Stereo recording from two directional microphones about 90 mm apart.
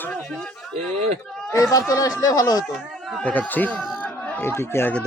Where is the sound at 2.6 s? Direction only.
Centre (ahead or behind).